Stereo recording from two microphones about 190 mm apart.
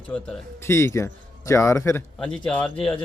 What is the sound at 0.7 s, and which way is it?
Speech, 15° left (ahead or behind).